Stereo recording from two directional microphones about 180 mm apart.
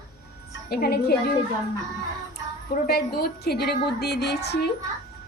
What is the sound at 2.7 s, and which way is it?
A woman's voice, 60° left (ahead or behind).